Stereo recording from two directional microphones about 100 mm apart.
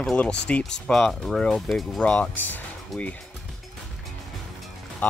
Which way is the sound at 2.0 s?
15° left (ahead or behind).